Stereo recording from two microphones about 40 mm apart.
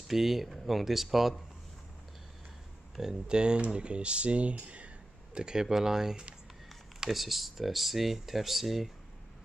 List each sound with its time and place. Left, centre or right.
0.1 s speech: centre
3.0 s speech: centre
5.4 s speech: centre